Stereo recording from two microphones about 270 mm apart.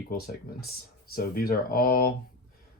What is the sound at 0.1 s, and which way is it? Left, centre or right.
Speech, left.